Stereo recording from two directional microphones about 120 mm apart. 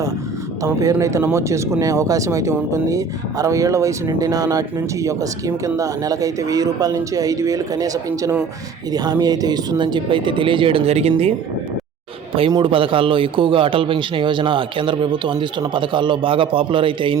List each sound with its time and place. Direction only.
0.6 s a man's voice: 25° right (ahead or behind); by 11.1 s 60° right (ahead or behind)
12.5 s a man's voice: 35° right (ahead or behind)
12.7 s a man's voice: 45° right (ahead or behind)